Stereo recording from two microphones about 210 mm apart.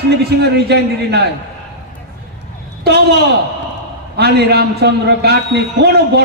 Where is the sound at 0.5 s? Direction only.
50° right (ahead or behind).